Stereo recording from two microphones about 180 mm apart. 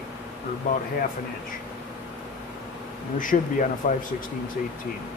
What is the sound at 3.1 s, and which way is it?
Speech, 45° left (ahead or behind).